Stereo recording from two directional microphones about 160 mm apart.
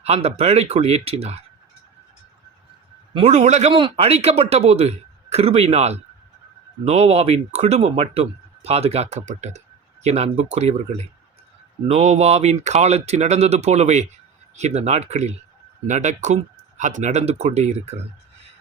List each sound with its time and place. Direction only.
0.0 s speech: 40° right (ahead or behind)
3.2 s speech: 45° right (ahead or behind)